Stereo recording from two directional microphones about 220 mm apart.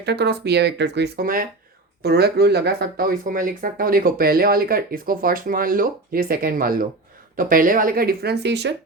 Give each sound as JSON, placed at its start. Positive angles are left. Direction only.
{"t": 0.0, "sound": "speech", "side_deg": -50}